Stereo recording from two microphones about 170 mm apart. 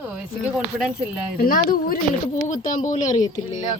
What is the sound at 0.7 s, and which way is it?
Speech, 5° right (ahead or behind).